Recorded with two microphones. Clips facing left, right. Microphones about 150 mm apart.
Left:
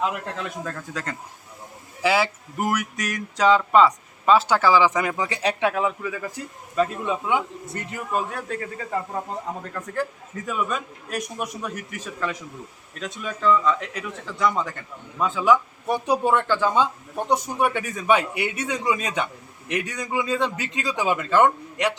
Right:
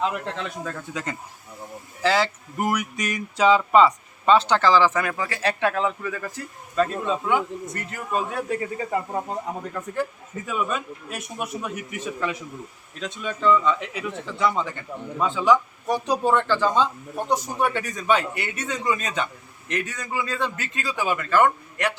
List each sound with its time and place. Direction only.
0.0 s speech: 5° left (ahead or behind)
2.0 s speech: 10° left (ahead or behind)
8.1 s a man's voice: 5° right (ahead or behind)
9.7 s speech: 5° right (ahead or behind); by 21.9 s 20° left (ahead or behind)